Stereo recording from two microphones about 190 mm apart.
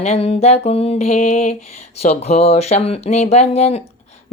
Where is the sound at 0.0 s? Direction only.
35° left (ahead or behind).